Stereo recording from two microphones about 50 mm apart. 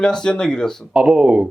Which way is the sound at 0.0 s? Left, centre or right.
Centre.